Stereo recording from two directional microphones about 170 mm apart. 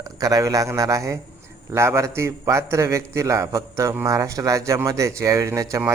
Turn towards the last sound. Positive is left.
turn(degrees=-15)  # may be behind; listen again after turning